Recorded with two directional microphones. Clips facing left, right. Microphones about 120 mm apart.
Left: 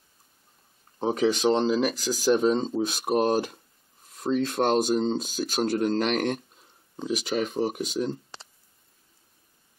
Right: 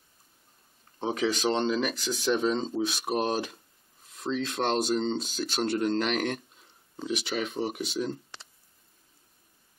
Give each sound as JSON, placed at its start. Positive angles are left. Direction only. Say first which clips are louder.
{"t": 1.0, "sound": "speech", "louder": "left 5 dB", "side_deg": 35}
{"t": 1.3, "sound": "speech", "louder": "left 4 dB", "side_deg": 5}